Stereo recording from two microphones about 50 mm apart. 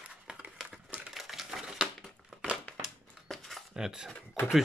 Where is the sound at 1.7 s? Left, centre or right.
Centre.